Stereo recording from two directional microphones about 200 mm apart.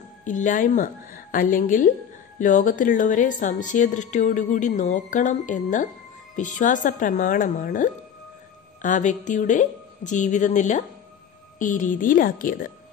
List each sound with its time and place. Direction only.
0.2 s a woman's voice: 40° left (ahead or behind)